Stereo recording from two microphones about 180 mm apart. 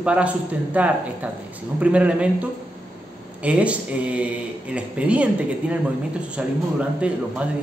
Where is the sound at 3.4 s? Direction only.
5° right (ahead or behind).